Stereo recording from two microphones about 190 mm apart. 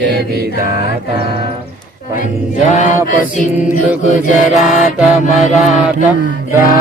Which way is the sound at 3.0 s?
40° left (ahead or behind).